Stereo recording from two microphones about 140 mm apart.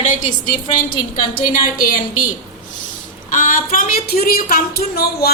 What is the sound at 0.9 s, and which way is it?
Speech, 90° left.